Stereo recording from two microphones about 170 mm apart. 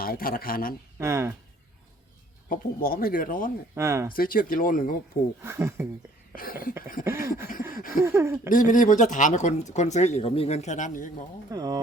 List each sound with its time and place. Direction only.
0.0 s speech: 60° left (ahead or behind)
0.9 s speech: 15° right (ahead or behind)
2.5 s speech: 60° left (ahead or behind)
3.8 s speech: 15° right (ahead or behind)
4.1 s speech: 60° left (ahead or behind)
5.4 s speech: 15° right (ahead or behind)
6.3 s speech: 55° left (ahead or behind)
7.0 s speech: 15° right (ahead or behind)
7.8 s a sound: 55° left (ahead or behind)
8.0 s speech: 15° right (ahead or behind)
8.4 s speech: 50° left (ahead or behind)
11.5 s speech: 20° right (ahead or behind)